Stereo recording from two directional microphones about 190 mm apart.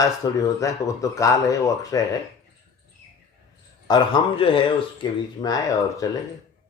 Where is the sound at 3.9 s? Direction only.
25° left (ahead or behind).